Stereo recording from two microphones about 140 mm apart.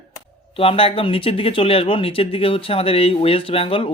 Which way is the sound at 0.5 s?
40° left (ahead or behind).